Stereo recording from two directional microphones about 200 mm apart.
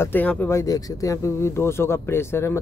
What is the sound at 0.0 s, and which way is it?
Speech, 10° left (ahead or behind).